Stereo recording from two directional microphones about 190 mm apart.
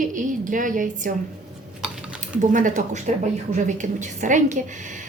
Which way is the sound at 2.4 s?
45° right (ahead or behind).